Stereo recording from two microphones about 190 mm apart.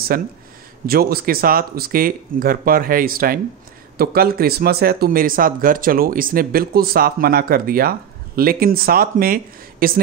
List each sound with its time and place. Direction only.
0.1 s speech: 50° right (ahead or behind)